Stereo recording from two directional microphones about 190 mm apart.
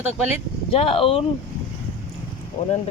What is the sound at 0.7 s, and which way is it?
Speech, 30° left (ahead or behind).